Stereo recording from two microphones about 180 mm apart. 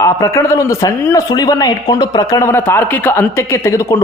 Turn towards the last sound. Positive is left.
turn(degrees=15)  # may be behind; listen again after turning